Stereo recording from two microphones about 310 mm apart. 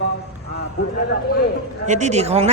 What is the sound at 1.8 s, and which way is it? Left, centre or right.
Speech, right.